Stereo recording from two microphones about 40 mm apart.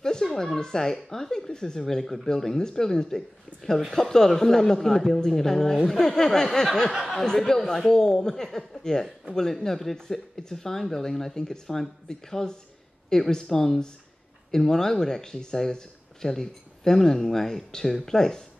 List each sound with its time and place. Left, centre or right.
0.0 s speech: centre